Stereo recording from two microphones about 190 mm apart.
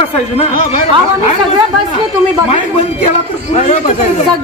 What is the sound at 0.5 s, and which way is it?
Speech, 50° left (ahead or behind).